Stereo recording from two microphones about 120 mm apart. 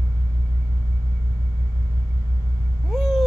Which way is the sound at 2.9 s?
Centre (ahead or behind).